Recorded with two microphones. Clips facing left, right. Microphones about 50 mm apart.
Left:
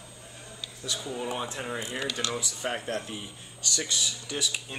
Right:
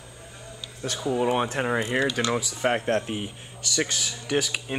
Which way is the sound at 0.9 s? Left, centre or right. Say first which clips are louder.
Right 9 dB; right.